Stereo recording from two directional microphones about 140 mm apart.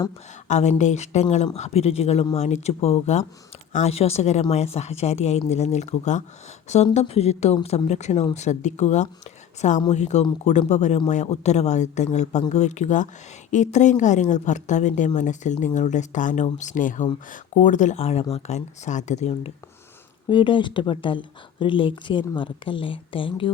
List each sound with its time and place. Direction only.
0.4 s a woman's voice: 55° left (ahead or behind)
20.2 s speech: 35° left (ahead or behind)